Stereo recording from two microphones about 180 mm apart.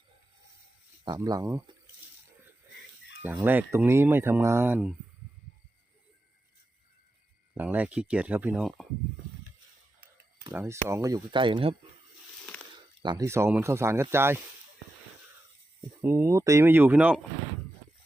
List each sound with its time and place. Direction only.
1.0 s speech: 20° right (ahead or behind)
3.2 s speech: 10° right (ahead or behind)
7.5 s speech: 10° right (ahead or behind)
10.5 s speech: 15° right (ahead or behind); by 11.8 s 30° right (ahead or behind)
13.0 s speech: 20° right (ahead or behind)
16.0 s speech: 15° right (ahead or behind)